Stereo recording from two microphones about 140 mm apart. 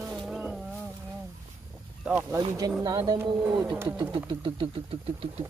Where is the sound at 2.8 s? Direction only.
30° right (ahead or behind).